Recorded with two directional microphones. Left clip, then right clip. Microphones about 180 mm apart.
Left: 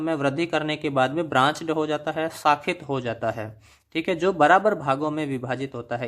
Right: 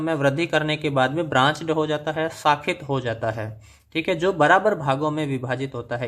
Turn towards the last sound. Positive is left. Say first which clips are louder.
# right 2 dB
turn(degrees=25)  # may be behind; listen again after turning